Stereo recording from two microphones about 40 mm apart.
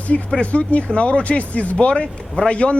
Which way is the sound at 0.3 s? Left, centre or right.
Left.